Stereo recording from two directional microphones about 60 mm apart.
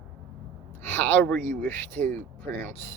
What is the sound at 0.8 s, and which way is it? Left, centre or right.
Speech, left.